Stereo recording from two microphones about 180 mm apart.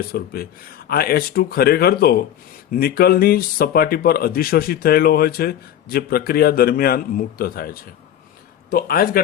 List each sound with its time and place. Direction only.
0.1 s speech: 55° left (ahead or behind)